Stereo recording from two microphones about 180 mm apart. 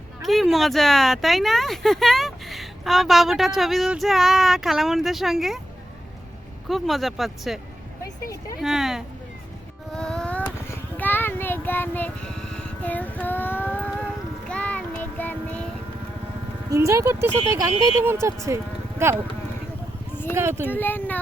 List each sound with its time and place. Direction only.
0.2 s speech: centre (ahead or behind)
6.7 s speech: centre (ahead or behind)
8.0 s speech: 15° left (ahead or behind)
8.6 s speech: centre (ahead or behind)
9.9 s child singing: 5° left (ahead or behind)
16.7 s speech: 15° right (ahead or behind)
20.3 s speech: 15° right (ahead or behind)
20.7 s speech: 10° left (ahead or behind)